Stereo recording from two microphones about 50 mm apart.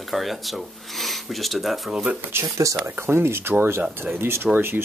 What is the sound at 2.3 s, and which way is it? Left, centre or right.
Speech, right.